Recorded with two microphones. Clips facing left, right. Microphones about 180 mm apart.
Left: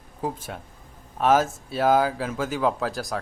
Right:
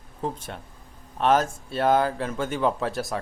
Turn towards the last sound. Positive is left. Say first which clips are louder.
# even
turn(degrees=0)  # may be behind; listen again after turning